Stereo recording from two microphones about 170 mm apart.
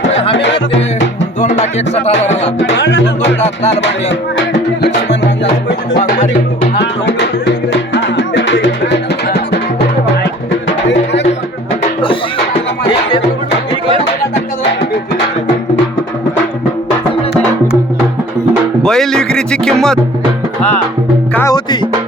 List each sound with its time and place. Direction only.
0.1 s music: 90° left
1.4 s music: 45° left (ahead or behind)
2.6 s music: 90° left
6.7 s music: 90° left
10.8 s music: 90° left
18.8 s speech: 5° left (ahead or behind)
21.3 s music: 20° left (ahead or behind)